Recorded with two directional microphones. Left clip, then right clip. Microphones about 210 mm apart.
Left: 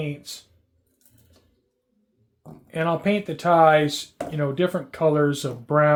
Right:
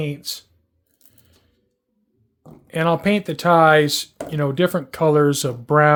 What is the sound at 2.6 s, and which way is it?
Speech, 35° right (ahead or behind).